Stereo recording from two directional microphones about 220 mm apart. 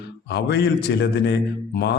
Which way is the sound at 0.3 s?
50° left (ahead or behind).